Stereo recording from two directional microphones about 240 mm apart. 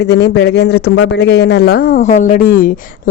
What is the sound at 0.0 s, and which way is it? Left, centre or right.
A woman's voice, left.